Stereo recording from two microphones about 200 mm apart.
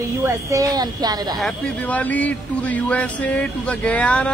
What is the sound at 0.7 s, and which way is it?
Speech, 20° right (ahead or behind).